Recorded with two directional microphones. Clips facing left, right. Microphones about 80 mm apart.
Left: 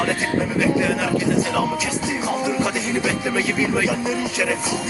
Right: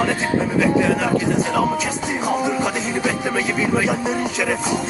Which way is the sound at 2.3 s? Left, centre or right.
Right.